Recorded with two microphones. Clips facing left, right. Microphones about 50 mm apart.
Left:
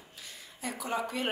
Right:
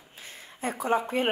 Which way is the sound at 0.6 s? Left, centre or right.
Right.